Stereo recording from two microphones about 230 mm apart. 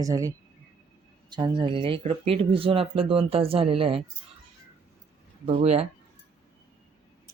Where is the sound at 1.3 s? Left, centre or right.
Centre.